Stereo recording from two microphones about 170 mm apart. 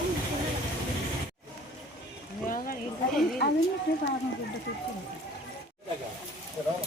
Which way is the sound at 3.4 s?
80° left.